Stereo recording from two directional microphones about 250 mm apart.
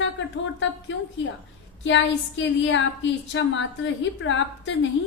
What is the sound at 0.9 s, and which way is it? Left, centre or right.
A woman's voice, left.